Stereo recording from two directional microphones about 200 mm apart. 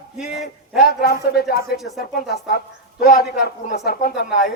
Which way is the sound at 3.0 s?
50° left (ahead or behind).